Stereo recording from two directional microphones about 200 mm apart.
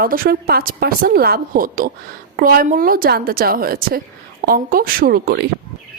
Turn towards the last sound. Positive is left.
turn(degrees=-50)  # may be behind; listen again after turning